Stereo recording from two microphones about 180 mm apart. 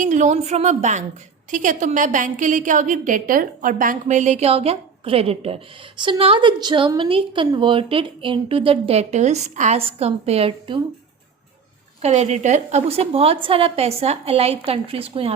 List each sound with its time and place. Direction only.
0.0 s a woman's voice: 40° right (ahead or behind)
12.0 s a woman's voice: 40° right (ahead or behind)